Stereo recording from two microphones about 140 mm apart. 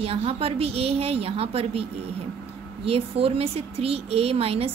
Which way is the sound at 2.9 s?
45° right (ahead or behind).